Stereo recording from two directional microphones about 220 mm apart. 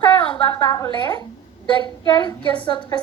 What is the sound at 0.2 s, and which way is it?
A woman's voice, 20° left (ahead or behind).